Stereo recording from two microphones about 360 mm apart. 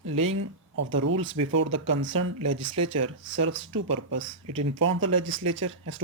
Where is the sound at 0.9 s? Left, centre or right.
Right.